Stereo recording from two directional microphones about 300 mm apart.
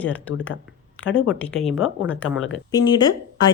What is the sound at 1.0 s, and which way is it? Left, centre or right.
Speech, left.